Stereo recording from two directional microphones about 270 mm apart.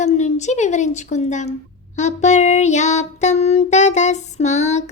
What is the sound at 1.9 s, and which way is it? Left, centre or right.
Female singing, left.